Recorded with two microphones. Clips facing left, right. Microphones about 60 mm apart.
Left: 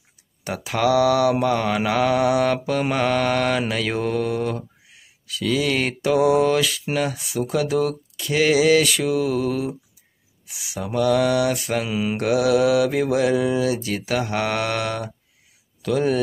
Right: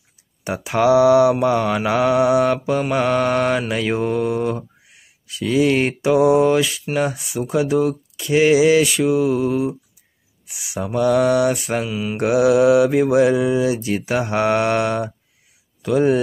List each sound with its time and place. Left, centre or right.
0.4 s speech: centre
11.5 s speech: centre
11.9 s mantra: centre
12.2 s speech: right